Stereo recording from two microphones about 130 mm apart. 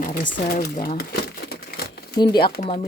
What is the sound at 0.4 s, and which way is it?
Speech, 90° left.